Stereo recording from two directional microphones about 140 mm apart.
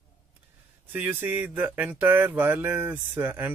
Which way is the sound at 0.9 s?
15° right (ahead or behind).